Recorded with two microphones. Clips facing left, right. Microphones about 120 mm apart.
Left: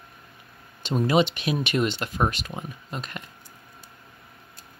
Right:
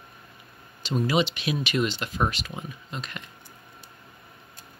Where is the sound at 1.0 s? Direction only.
45° left (ahead or behind).